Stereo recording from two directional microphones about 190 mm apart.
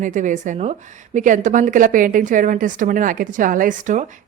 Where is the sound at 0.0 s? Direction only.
40° right (ahead or behind).